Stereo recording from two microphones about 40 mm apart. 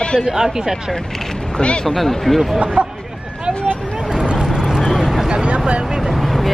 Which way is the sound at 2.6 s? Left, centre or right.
Right.